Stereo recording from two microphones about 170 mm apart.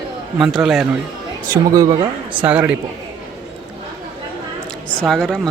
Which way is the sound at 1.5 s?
20° right (ahead or behind).